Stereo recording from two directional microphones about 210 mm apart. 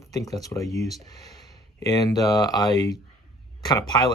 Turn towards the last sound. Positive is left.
turn(degrees=20)  # may be behind; listen again after turning